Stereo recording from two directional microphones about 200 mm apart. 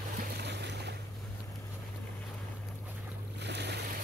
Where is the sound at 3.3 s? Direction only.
55° right (ahead or behind).